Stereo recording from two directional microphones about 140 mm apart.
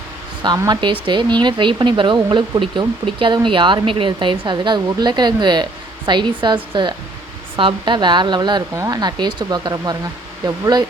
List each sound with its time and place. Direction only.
0.4 s speech: 30° right (ahead or behind)